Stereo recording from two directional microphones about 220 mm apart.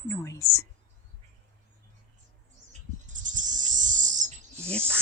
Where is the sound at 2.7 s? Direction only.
35° right (ahead or behind).